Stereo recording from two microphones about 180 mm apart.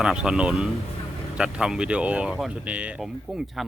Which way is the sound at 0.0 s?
5° right (ahead or behind).